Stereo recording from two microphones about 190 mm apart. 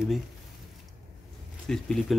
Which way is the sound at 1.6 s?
Centre (ahead or behind).